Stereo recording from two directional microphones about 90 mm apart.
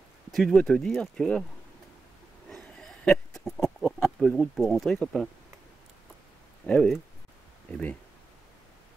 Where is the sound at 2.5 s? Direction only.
5° left (ahead or behind).